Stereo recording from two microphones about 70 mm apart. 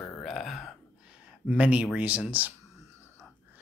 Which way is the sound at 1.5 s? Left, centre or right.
Centre.